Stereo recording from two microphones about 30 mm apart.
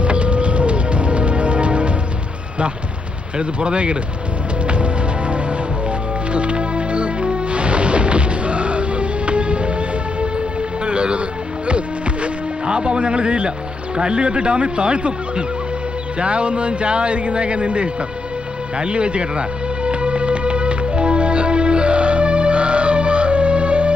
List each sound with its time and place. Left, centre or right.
0.0 s music: right
3.3 s speech: right
4.6 s music: right
6.3 s music: right
10.8 s music: right
13.9 s speech: right
18.8 s music: right